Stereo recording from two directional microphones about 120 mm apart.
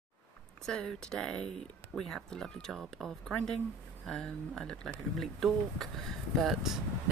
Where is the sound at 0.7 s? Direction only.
5° left (ahead or behind).